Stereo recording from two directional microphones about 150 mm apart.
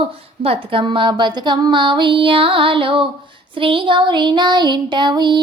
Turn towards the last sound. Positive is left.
turn(degrees=-30)  # may be behind; listen again after turning